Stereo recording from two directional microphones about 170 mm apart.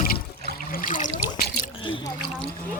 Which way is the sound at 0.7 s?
50° left (ahead or behind).